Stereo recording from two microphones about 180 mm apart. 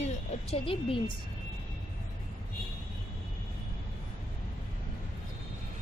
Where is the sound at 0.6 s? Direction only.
30° left (ahead or behind).